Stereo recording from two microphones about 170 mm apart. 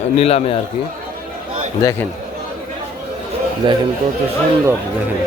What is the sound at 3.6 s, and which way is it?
Speech, 30° right (ahead or behind).